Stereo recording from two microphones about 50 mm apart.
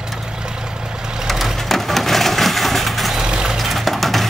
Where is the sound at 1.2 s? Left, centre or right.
Centre.